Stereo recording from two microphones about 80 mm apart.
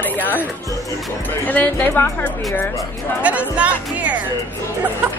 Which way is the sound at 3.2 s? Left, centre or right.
Centre.